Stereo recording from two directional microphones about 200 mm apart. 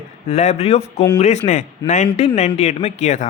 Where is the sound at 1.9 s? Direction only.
35° left (ahead or behind).